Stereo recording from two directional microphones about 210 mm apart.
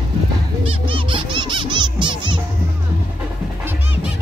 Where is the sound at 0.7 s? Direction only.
25° right (ahead or behind).